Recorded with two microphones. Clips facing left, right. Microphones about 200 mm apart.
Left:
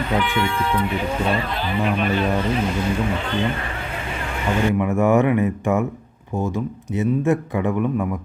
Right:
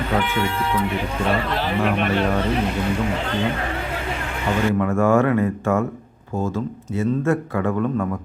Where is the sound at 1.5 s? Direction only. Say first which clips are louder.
Right 1 dB; 75° right (ahead or behind).